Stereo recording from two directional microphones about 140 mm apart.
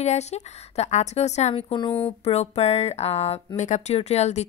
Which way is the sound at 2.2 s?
50° left (ahead or behind).